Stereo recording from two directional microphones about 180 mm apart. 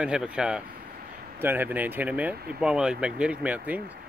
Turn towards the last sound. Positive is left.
turn(degrees=-5)  # may be behind; listen again after turning